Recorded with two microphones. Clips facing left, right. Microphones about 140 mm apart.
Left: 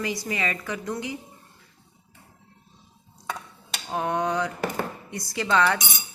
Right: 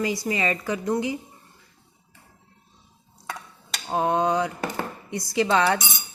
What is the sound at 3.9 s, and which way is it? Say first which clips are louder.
A woman's voice: right 4 dB; 25° right (ahead or behind).